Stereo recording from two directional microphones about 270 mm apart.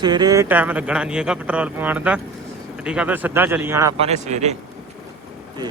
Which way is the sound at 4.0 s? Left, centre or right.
Right.